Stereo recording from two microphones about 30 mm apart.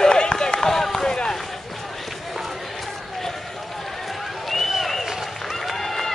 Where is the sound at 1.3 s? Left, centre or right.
Centre.